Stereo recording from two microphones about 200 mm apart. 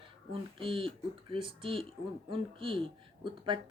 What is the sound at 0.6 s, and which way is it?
Speech, 25° right (ahead or behind).